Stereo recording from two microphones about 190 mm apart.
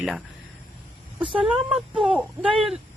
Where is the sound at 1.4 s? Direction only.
5° right (ahead or behind).